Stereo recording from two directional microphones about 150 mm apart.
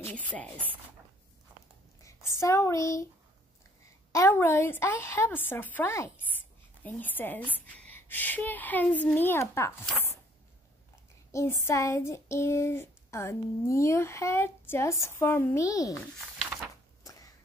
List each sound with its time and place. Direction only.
0.0 s speech: 10° left (ahead or behind)
2.0 s a woman's voice: 20° left (ahead or behind)
4.1 s a woman's voice: 20° left (ahead or behind)
11.3 s child singing: 20° left (ahead or behind)
16.3 s a sound: centre (ahead or behind)